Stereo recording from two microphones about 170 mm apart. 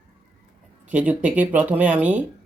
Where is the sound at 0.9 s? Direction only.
10° right (ahead or behind).